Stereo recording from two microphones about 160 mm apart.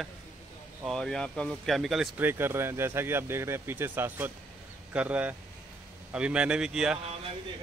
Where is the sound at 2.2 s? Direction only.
15° right (ahead or behind).